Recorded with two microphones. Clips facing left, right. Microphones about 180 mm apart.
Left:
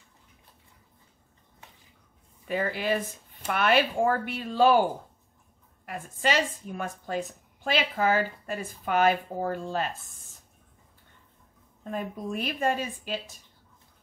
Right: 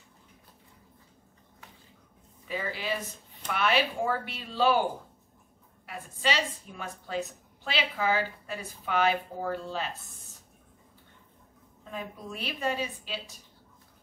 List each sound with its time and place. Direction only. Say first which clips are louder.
2.4 s a woman's voice: left 6 dB; 55° left (ahead or behind)
5.9 s a woman's voice: left 3 dB; 50° left (ahead or behind)
11.9 s a woman's voice: left 6 dB; 50° left (ahead or behind)